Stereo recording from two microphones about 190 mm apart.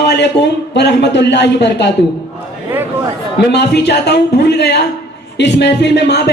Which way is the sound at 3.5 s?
60° left (ahead or behind).